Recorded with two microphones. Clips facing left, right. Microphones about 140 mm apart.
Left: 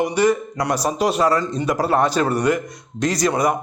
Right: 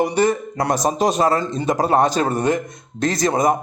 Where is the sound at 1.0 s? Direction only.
40° right (ahead or behind).